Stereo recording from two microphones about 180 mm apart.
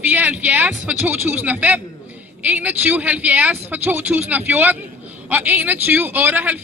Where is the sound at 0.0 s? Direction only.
10° right (ahead or behind).